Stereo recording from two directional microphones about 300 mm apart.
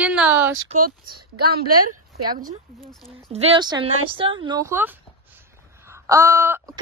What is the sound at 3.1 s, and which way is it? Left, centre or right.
Speech, centre.